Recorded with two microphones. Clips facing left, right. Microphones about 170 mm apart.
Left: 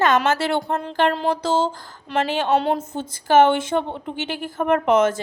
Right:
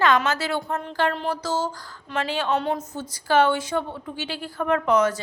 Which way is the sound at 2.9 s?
25° left (ahead or behind).